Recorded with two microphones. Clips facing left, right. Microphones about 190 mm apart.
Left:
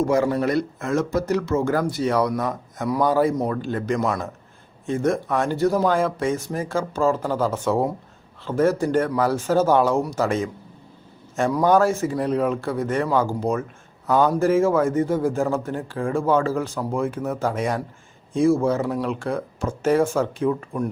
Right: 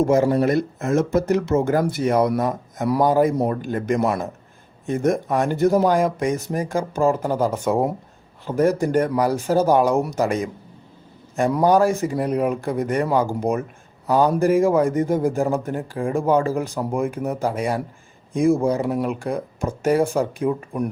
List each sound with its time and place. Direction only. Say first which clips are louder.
0.0 s speech: right 3 dB; 25° right (ahead or behind)
11.7 s speech: right 1 dB; 15° right (ahead or behind)
19.0 s speech: right 1 dB; 10° right (ahead or behind)